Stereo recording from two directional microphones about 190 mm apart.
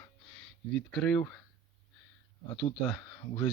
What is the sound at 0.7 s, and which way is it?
Speech, 5° left (ahead or behind).